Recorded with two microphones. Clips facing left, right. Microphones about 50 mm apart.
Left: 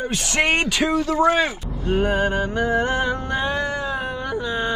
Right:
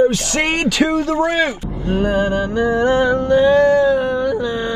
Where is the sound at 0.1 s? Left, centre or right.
Left.